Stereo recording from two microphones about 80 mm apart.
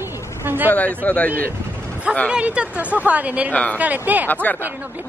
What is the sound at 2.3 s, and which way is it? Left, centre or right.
Speech, centre.